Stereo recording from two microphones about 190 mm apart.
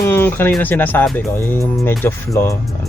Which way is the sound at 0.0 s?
10° left (ahead or behind).